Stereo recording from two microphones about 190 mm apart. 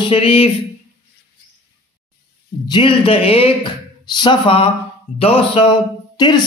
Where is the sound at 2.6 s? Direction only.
25° left (ahead or behind).